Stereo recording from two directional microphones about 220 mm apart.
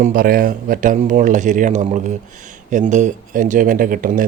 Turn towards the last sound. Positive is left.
turn(degrees=-40)  # may be behind; listen again after turning